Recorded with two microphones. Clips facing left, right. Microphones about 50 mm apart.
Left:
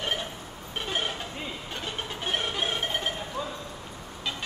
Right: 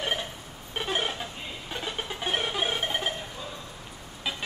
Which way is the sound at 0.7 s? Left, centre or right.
Centre.